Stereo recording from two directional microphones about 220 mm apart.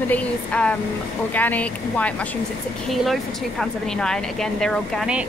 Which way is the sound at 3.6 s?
5° left (ahead or behind).